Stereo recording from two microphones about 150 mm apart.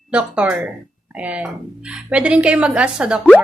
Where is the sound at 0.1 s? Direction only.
5° right (ahead or behind).